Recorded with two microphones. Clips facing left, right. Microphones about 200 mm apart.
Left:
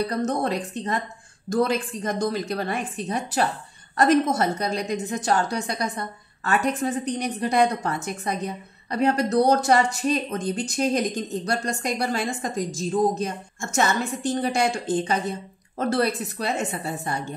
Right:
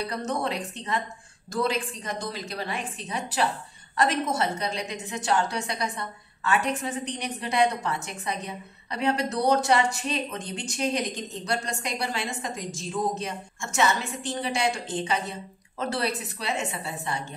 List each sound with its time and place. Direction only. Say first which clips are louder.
0.0 s speech: left 5 dB; 45° left (ahead or behind)